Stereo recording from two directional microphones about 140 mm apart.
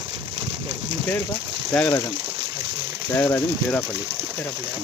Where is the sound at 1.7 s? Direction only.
5° left (ahead or behind).